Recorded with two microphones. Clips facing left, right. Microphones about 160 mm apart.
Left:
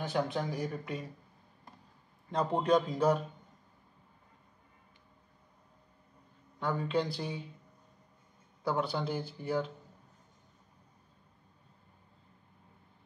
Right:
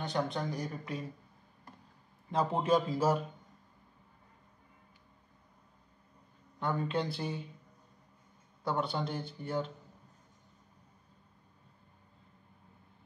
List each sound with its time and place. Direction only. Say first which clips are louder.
0.0 s speech: left 1 dB; 5° left (ahead or behind)
2.3 s speech: left 1 dB; 5° right (ahead or behind)
6.6 s speech: left 1 dB; centre (ahead or behind)
8.6 s speech: left 1 dB; centre (ahead or behind)